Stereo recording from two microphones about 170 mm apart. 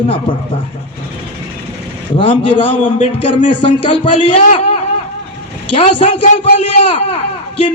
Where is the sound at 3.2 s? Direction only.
30° left (ahead or behind).